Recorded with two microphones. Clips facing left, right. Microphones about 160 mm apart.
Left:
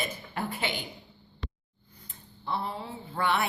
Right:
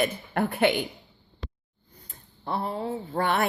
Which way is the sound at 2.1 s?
45° right (ahead or behind).